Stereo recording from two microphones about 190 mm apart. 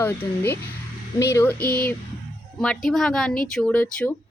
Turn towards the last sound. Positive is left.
turn(degrees=5)  # may be behind; listen again after turning